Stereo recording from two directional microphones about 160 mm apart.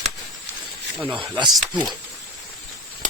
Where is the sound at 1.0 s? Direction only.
5° right (ahead or behind).